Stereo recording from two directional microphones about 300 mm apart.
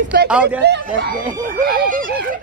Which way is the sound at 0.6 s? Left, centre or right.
Right.